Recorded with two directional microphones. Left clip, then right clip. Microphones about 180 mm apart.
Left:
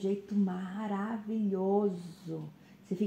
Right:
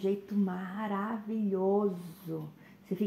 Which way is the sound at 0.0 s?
25° right (ahead or behind).